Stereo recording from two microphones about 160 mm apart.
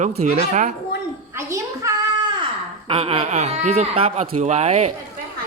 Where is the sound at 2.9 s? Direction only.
35° right (ahead or behind).